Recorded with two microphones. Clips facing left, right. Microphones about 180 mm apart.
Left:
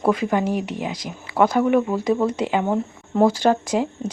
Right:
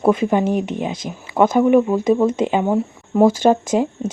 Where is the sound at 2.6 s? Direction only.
10° right (ahead or behind).